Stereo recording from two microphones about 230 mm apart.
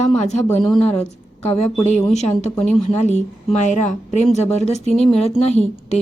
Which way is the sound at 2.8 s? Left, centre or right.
Left.